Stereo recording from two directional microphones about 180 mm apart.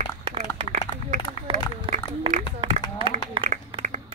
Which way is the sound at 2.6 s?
30° right (ahead or behind).